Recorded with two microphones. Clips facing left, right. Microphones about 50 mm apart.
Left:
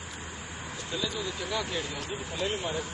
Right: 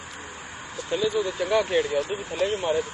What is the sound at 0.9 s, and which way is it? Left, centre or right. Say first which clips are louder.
Speech: right 9 dB; right.